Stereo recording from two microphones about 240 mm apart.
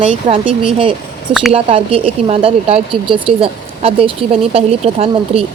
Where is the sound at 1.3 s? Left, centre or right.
Centre.